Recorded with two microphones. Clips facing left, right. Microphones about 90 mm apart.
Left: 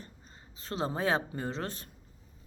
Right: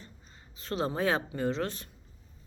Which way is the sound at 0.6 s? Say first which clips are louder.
Right 2 dB; 30° left (ahead or behind).